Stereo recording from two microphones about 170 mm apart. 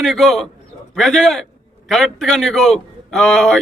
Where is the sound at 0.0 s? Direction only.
Centre (ahead or behind).